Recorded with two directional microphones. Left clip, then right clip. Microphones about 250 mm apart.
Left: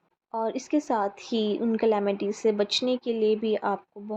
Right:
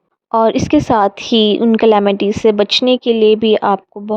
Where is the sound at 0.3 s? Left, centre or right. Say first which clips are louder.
Right 16 dB; right.